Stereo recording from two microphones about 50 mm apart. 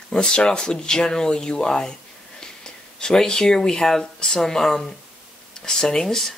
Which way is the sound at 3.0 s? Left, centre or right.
Centre.